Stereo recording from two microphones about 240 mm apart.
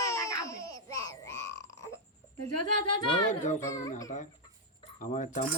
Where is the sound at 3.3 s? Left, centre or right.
Left.